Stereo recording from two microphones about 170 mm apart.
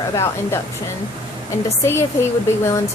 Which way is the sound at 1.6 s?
15° left (ahead or behind).